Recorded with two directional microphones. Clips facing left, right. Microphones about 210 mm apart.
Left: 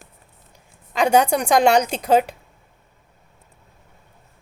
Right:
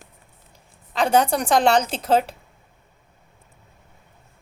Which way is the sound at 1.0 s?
15° left (ahead or behind).